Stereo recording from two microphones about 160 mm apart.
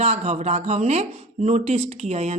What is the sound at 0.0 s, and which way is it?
Speech, 40° right (ahead or behind).